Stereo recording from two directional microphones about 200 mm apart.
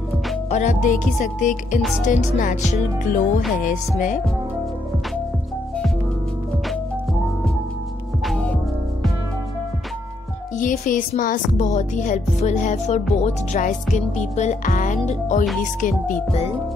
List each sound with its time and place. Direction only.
0.5 s music: 35° left (ahead or behind)
10.6 s music: 40° left (ahead or behind)